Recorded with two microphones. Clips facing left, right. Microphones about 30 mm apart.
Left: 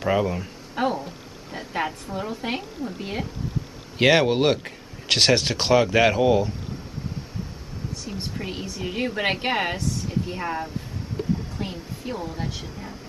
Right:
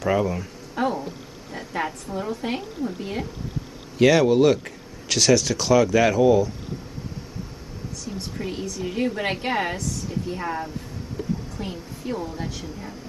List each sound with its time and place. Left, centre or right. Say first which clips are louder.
0.0 s a woman's voice: even; centre
4.0 s speech: right 2 dB; left
8.1 s speech: right 2 dB; left
8.4 s a woman's voice: right 5 dB; left
9.8 s speech: left 2 dB; left
10.3 s a woman's voice: even; centre